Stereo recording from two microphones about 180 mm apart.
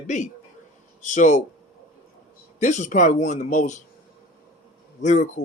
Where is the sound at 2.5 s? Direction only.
40° left (ahead or behind).